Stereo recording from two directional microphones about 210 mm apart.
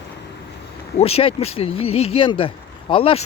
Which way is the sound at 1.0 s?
30° left (ahead or behind).